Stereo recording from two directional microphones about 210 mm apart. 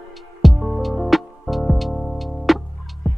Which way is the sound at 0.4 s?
Centre (ahead or behind).